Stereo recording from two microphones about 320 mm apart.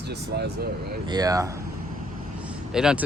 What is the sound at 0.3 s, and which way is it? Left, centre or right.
Speech, right.